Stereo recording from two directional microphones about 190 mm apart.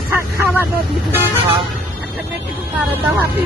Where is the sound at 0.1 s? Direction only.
10° right (ahead or behind).